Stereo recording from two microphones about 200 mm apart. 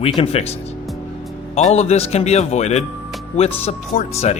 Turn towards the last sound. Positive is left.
turn(degrees=35)  # may be behind; listen again after turning